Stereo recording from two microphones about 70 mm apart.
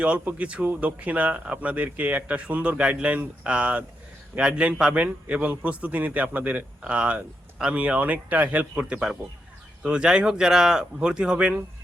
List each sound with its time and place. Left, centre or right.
0.0 s a man's voice: centre